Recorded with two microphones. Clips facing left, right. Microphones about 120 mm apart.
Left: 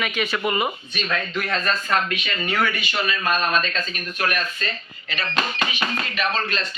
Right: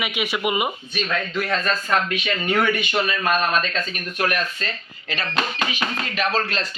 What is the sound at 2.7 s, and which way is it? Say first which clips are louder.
Speech: right 5 dB; 55° right (ahead or behind).